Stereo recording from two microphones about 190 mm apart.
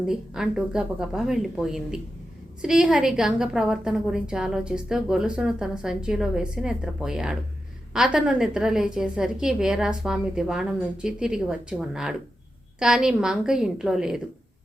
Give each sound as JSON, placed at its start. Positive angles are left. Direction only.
{"t": 0.0, "sound": "a woman's voice", "side_deg": -5}